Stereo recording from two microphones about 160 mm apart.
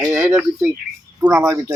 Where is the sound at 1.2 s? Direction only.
20° right (ahead or behind).